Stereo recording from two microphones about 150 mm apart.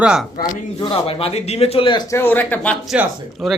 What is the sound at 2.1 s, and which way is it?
Speech, 15° left (ahead or behind).